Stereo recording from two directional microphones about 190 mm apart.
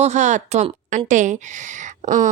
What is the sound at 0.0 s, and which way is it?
A woman's voice, 40° right (ahead or behind).